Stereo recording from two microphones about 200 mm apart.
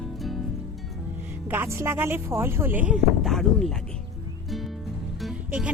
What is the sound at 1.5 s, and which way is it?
Speech, 10° right (ahead or behind).